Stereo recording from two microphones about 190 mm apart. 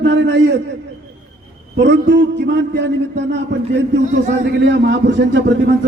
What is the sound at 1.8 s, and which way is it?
A man's voice, 65° right (ahead or behind).